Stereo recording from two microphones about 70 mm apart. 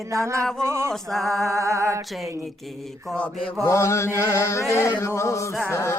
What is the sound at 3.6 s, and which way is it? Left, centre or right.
Chant, left.